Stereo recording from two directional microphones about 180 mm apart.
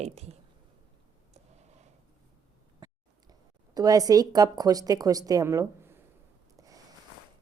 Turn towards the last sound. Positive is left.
turn(degrees=-20)  # may be behind; listen again after turning